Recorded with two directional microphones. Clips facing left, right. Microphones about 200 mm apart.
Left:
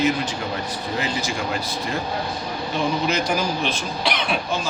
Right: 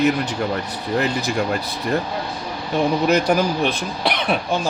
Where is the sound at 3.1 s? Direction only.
60° right (ahead or behind).